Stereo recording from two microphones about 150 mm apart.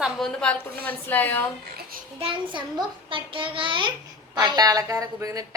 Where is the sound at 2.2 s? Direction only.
35° right (ahead or behind).